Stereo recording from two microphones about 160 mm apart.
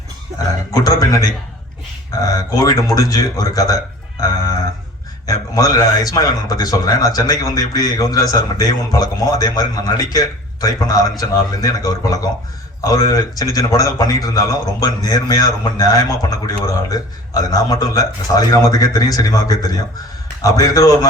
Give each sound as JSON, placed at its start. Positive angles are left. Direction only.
{"t": 0.7, "sound": "a man's voice", "side_deg": 25}
{"t": 5.2, "sound": "a man's voice", "side_deg": 25}